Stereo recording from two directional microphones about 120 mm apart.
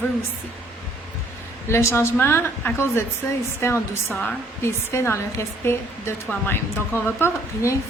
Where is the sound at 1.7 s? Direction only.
20° left (ahead or behind).